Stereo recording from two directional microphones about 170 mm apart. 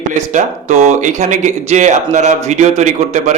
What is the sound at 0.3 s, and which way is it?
A man's voice, 45° right (ahead or behind).